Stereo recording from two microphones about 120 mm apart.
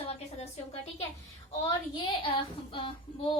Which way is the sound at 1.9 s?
45° left (ahead or behind).